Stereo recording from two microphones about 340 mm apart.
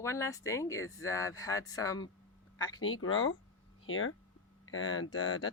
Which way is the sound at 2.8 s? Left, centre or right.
Left.